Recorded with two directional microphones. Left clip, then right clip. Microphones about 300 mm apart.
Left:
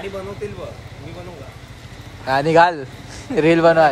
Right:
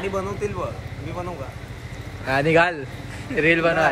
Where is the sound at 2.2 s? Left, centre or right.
Centre.